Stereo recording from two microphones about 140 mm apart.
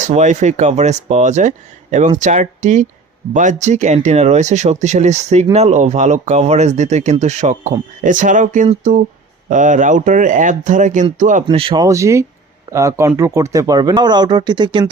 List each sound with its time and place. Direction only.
0.0 s speech: 60° right (ahead or behind)
11.4 s speech: 35° right (ahead or behind)
11.8 s speech: 20° right (ahead or behind)